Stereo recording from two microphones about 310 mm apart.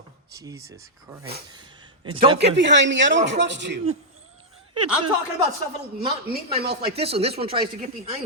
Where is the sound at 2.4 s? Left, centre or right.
Right.